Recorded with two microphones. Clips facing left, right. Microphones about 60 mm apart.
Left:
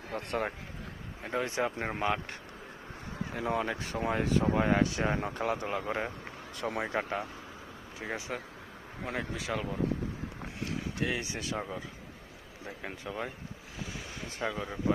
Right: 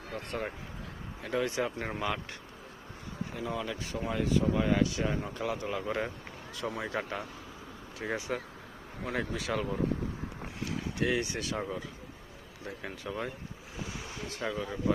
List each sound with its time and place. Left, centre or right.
0.1 s speech: left
1.2 s speech: left
3.3 s speech: left
5.6 s speech: left
6.6 s speech: left
6.8 s speech: left
8.0 s speech: centre
11.0 s speech: centre
14.4 s speech: centre